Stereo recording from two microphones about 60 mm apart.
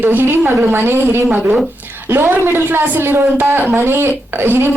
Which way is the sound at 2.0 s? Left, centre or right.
Right.